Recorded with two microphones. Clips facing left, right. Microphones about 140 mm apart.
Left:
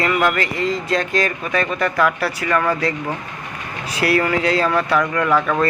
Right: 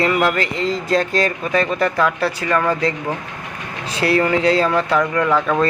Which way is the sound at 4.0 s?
25° right (ahead or behind).